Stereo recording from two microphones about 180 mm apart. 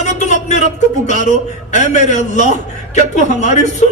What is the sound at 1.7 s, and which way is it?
A man's voice, 40° left (ahead or behind).